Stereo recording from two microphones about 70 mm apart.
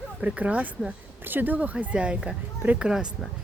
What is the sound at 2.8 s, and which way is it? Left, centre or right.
Speech, centre.